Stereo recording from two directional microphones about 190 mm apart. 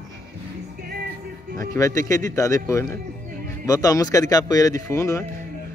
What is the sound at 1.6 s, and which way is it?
Speech, 15° left (ahead or behind).